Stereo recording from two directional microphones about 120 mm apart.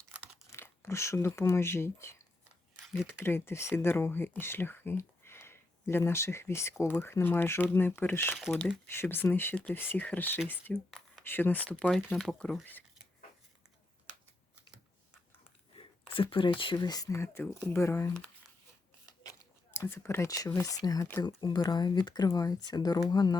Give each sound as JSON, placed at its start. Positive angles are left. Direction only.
{"t": 0.5, "sound": "speech", "side_deg": 20}
{"t": 8.4, "sound": "speech", "side_deg": 0}
{"t": 8.6, "sound": "speech", "side_deg": 20}
{"t": 11.7, "sound": "speech", "side_deg": 5}
{"t": 16.1, "sound": "speech", "side_deg": 45}
{"t": 19.0, "sound": "shuffling cards", "side_deg": 30}
{"t": 20.5, "sound": "speech", "side_deg": 25}